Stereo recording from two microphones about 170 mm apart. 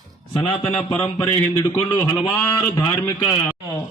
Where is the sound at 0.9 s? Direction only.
15° left (ahead or behind).